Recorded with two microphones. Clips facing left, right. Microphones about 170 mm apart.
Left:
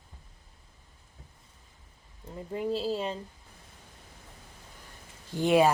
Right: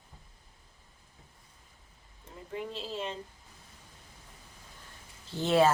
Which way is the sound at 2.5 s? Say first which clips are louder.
Left 8 dB; 35° left (ahead or behind).